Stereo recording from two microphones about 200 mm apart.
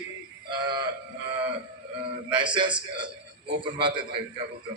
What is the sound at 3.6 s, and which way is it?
Speech, 25° right (ahead or behind).